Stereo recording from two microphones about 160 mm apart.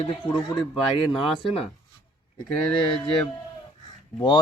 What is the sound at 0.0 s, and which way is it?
Speech, 35° left (ahead or behind).